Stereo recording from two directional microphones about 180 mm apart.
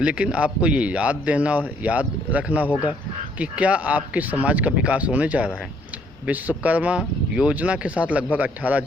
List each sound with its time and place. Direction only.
0.0 s a man's voice: 5° right (ahead or behind)